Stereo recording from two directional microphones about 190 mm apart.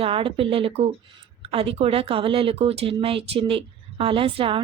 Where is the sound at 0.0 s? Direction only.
30° right (ahead or behind).